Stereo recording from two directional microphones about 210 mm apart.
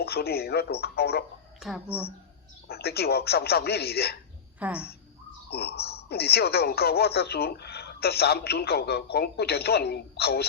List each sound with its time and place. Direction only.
0.0 s speech: 50° left (ahead or behind)
1.5 s speech: centre (ahead or behind)
1.9 s speech: 30° left (ahead or behind)
2.6 s speech: 50° left (ahead or behind)
4.6 s speech: 5° right (ahead or behind)
5.5 s speech: 50° left (ahead or behind)